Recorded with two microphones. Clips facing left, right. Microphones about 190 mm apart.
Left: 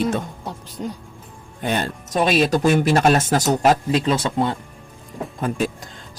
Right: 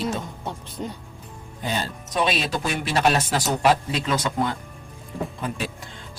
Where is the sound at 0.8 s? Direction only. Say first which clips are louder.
Left 3 dB; centre (ahead or behind).